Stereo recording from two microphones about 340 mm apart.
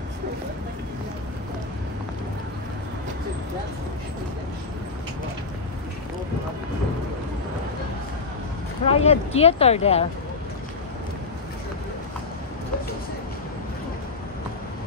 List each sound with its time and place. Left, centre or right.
8.8 s speech: centre